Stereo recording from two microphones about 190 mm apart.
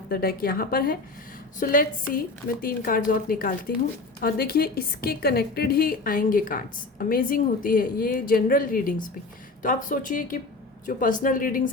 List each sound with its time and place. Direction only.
0.1 s a woman's voice: 50° left (ahead or behind)